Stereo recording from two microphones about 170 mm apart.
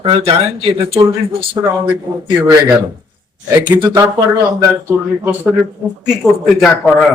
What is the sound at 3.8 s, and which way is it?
Speech, 20° right (ahead or behind).